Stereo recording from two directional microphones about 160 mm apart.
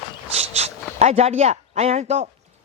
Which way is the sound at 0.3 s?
40° right (ahead or behind).